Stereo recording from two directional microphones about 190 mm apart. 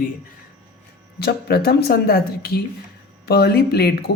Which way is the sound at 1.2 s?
55° left (ahead or behind).